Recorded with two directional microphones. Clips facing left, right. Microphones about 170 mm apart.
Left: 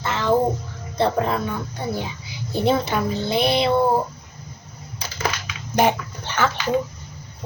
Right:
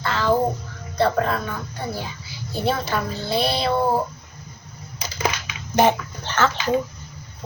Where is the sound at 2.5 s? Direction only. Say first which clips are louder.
Left 3 dB; 20° left (ahead or behind).